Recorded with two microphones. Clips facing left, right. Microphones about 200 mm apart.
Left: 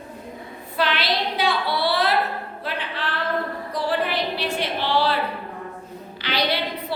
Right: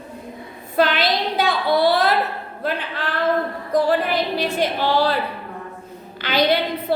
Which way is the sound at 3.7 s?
45° right (ahead or behind).